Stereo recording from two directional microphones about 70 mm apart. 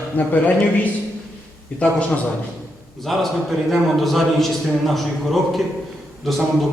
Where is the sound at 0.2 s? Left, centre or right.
Left.